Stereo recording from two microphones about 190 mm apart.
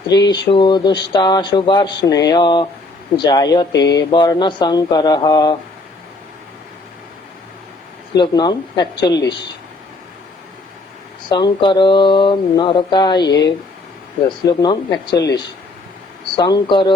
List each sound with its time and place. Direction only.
0.1 s speech: 20° left (ahead or behind)
8.2 s speech: 25° left (ahead or behind)
11.3 s speech: 25° left (ahead or behind)